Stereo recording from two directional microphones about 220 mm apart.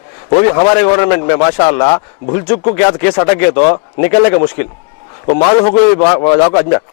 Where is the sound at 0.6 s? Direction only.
25° left (ahead or behind).